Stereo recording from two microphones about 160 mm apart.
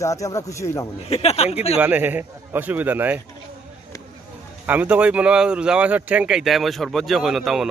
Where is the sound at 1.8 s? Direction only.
10° right (ahead or behind).